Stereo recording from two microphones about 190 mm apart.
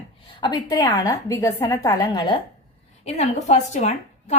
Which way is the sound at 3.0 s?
35° left (ahead or behind).